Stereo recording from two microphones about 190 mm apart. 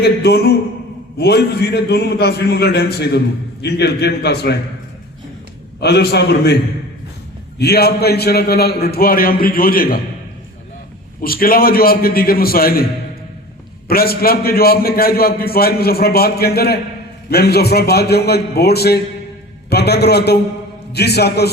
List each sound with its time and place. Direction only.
0.0 s a man's voice: 55° left (ahead or behind)
5.8 s a man's voice: 55° left (ahead or behind)
7.6 s a man's voice: 55° left (ahead or behind)
11.2 s a man's voice: 50° left (ahead or behind)
13.8 s a man's voice: 55° left (ahead or behind)